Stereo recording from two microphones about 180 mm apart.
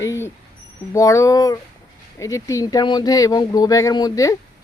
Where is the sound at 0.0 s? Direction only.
15° left (ahead or behind).